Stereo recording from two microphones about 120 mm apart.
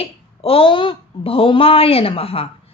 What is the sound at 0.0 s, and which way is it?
A woman's voice, 50° left (ahead or behind).